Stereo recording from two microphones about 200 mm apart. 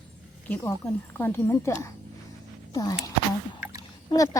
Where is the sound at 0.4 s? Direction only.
10° left (ahead or behind).